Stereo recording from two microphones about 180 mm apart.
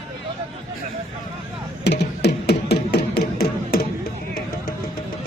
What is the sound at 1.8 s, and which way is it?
Music, 70° left (ahead or behind).